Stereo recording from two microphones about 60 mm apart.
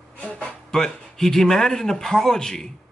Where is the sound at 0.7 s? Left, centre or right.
Centre.